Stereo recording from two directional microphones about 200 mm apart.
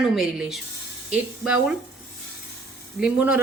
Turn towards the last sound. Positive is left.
turn(degrees=-5)  # may be behind; listen again after turning